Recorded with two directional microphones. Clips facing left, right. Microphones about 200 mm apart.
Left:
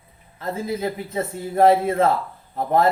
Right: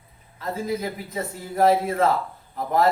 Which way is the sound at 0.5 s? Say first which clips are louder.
Left 2 dB; 25° left (ahead or behind).